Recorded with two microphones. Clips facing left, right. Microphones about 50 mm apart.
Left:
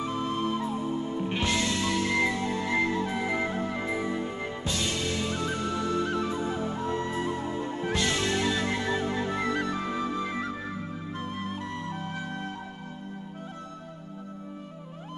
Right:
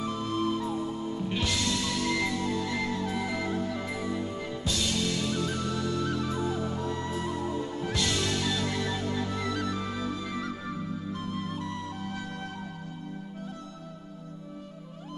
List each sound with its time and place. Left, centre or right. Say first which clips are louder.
0.0 s music: left 1 dB; left